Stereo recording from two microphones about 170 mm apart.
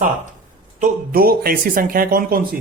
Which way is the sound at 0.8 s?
60° right (ahead or behind).